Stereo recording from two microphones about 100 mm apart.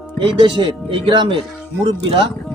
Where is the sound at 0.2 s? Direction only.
50° right (ahead or behind).